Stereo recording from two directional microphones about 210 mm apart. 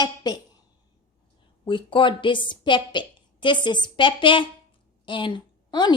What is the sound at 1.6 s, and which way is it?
A woman's voice, 25° left (ahead or behind).